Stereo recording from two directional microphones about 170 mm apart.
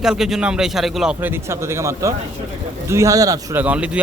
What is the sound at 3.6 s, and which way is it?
Speech, 5° right (ahead or behind).